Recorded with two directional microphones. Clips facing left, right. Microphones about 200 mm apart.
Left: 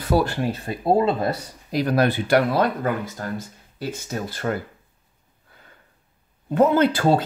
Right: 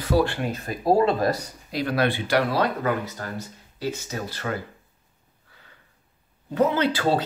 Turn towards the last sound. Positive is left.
turn(degrees=50)  # may be behind; listen again after turning